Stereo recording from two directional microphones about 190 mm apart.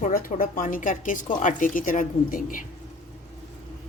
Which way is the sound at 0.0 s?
45° left (ahead or behind).